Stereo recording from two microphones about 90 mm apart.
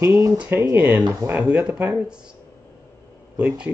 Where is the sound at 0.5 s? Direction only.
25° right (ahead or behind).